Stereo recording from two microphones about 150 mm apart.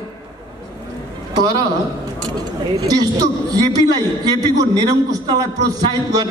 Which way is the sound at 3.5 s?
25° right (ahead or behind).